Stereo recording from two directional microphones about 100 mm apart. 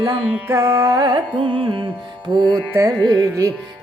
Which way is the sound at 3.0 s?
40° right (ahead or behind).